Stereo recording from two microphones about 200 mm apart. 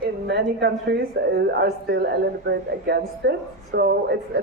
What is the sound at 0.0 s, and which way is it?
A woman's voice, 55° right (ahead or behind).